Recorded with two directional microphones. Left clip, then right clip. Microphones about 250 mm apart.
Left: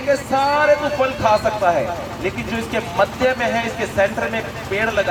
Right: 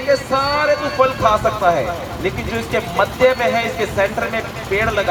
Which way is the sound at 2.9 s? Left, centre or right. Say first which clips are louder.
Right 3 dB; right.